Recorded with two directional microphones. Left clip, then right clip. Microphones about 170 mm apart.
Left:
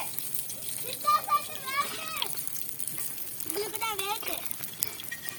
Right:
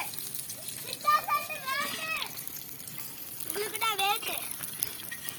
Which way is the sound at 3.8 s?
75° left (ahead or behind).